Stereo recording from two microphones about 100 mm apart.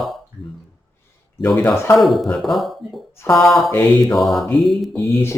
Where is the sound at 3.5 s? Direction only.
Centre (ahead or behind).